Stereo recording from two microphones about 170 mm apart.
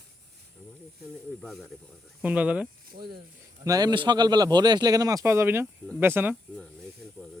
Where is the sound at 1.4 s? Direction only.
Centre (ahead or behind).